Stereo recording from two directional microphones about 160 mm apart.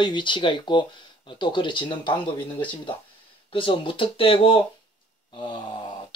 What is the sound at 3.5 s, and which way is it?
Speech, 35° left (ahead or behind).